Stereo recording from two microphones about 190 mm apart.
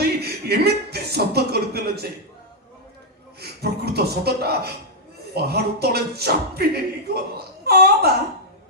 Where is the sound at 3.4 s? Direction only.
55° right (ahead or behind).